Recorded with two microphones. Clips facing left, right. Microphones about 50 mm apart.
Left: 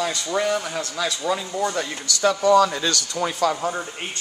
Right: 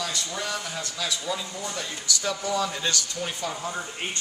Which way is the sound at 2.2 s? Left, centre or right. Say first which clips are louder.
Left 12 dB; left.